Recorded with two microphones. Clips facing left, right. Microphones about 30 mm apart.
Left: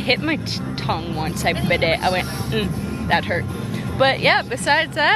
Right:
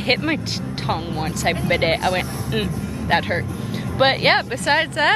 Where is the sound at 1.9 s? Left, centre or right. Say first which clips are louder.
Left 1 dB; left.